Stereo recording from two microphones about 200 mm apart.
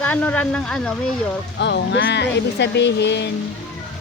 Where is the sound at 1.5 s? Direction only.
60° left (ahead or behind).